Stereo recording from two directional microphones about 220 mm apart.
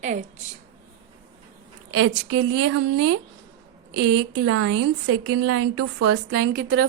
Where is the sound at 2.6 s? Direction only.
90° right.